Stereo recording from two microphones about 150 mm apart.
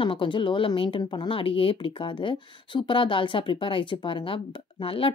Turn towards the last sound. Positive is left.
turn(degrees=35)  # may be behind; listen again after turning